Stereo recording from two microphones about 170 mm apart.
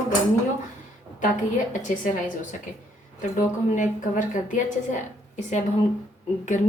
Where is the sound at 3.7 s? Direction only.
50° left (ahead or behind).